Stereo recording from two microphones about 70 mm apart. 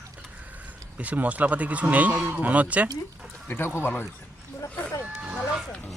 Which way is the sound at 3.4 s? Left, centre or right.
Left.